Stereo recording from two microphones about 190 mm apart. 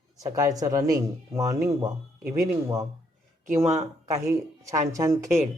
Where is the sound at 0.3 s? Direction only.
20° right (ahead or behind).